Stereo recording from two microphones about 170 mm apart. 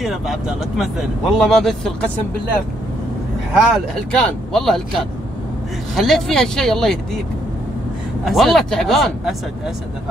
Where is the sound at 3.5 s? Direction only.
Centre (ahead or behind).